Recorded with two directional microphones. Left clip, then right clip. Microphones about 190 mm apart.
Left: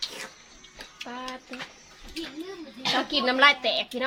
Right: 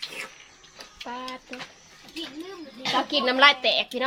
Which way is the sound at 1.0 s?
35° right (ahead or behind).